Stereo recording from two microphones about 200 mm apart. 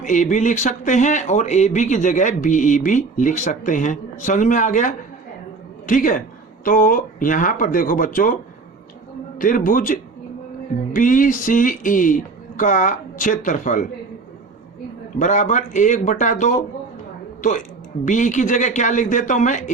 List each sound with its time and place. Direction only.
0.0 s a woman's voice: 40° left (ahead or behind)
9.4 s speech: 45° left (ahead or behind)
15.2 s speech: 40° left (ahead or behind)
18.0 s speech: 40° left (ahead or behind)